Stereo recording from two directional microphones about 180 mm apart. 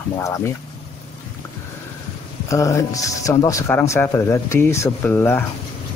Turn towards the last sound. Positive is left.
turn(degrees=10)  # may be behind; listen again after turning